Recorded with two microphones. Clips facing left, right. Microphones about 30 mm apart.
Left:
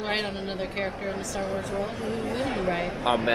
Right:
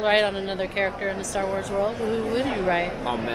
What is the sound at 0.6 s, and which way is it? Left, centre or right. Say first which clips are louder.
Speech: right 5 dB; right.